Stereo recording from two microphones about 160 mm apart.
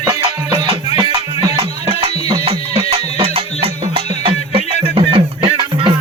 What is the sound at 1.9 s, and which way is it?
Music, 35° right (ahead or behind).